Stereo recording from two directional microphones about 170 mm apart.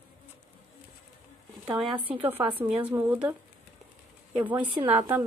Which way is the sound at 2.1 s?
10° right (ahead or behind).